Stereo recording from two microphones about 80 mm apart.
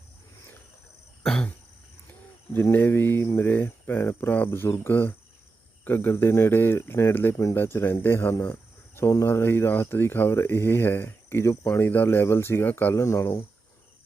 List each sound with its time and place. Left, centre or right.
1.2 s cough: centre
2.5 s speech: left
12.9 s speech: left